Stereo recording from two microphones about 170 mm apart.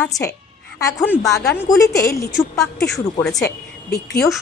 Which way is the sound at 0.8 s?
20° left (ahead or behind).